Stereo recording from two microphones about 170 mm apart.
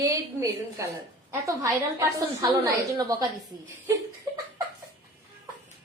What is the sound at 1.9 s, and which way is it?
A woman's voice, 20° right (ahead or behind).